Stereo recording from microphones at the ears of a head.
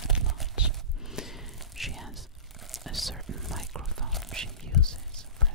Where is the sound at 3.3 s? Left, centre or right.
Right.